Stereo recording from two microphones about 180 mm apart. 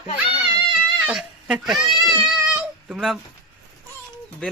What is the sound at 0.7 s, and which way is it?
Cat, 5° right (ahead or behind).